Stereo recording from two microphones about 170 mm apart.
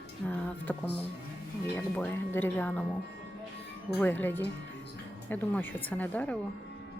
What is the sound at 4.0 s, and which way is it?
Speech, 10° left (ahead or behind).